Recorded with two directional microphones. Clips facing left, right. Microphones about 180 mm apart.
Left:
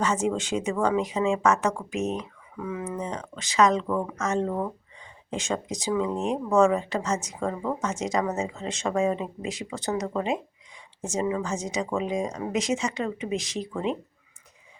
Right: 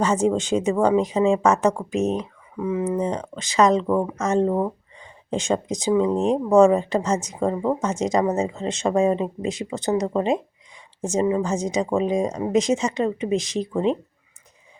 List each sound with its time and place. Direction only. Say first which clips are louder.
0.0 s a woman's voice: right 5 dB; 35° right (ahead or behind)